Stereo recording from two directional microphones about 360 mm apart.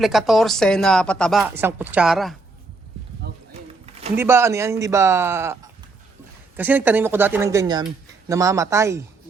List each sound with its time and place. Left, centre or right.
0.0 s speech: centre
3.3 s a sound: right
4.2 s a man's voice: centre
6.6 s a man's voice: centre